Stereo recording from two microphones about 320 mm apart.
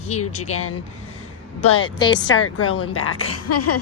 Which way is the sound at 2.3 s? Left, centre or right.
Left.